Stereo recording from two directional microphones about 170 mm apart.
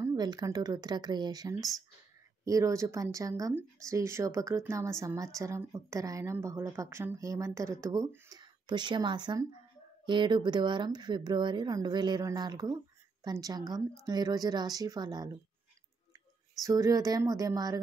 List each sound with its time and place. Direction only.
0.0 s speech: 25° right (ahead or behind)
16.6 s speech: 20° right (ahead or behind)